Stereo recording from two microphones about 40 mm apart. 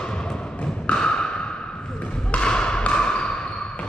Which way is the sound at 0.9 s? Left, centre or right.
Left.